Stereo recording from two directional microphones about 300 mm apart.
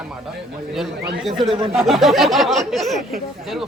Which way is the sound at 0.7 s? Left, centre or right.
Centre.